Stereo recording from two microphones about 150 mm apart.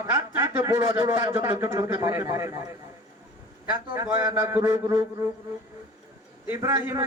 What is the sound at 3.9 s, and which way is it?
A man's voice, 20° right (ahead or behind).